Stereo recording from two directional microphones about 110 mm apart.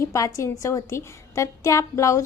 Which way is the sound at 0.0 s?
30° left (ahead or behind).